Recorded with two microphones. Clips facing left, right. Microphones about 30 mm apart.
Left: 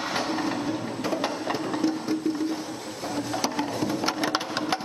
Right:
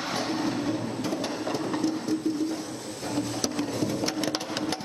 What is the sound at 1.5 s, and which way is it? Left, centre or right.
Train, centre.